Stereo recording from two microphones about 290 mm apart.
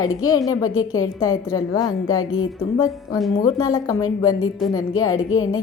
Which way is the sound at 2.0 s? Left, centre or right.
Left.